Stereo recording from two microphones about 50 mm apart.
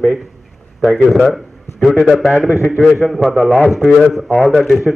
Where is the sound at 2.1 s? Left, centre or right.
Centre.